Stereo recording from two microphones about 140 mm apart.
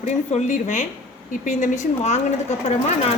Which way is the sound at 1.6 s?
55° left (ahead or behind).